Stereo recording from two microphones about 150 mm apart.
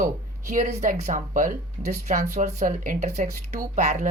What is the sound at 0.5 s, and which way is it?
Speech, 50° right (ahead or behind).